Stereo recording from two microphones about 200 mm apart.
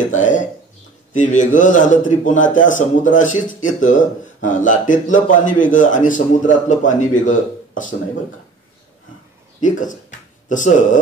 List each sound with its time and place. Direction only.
0.1 s a man's voice: 40° left (ahead or behind)
9.6 s a man's voice: 40° left (ahead or behind)